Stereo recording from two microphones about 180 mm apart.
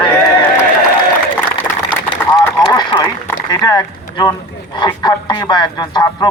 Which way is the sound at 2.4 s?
20° left (ahead or behind).